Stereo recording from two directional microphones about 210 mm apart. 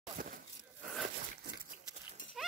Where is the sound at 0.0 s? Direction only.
40° right (ahead or behind).